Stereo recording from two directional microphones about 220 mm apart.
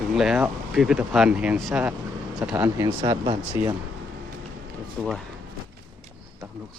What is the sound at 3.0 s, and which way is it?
Speech, 25° right (ahead or behind).